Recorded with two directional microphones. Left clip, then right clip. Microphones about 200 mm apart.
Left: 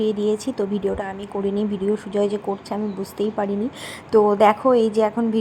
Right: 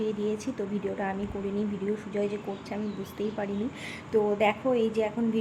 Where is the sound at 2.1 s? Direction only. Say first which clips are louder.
Left 9 dB; 20° left (ahead or behind).